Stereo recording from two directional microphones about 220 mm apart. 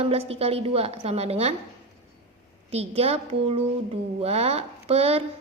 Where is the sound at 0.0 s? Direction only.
25° right (ahead or behind).